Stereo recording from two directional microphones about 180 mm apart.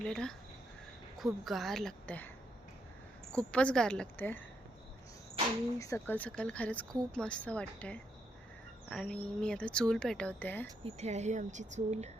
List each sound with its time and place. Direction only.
0.0 s speech: 5° left (ahead or behind)
3.3 s speech: 5° left (ahead or behind)
5.8 s speech: 15° left (ahead or behind)
10.8 s speech: 35° right (ahead or behind)